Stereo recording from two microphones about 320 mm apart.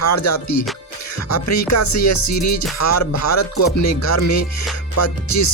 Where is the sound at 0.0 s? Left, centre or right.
Left.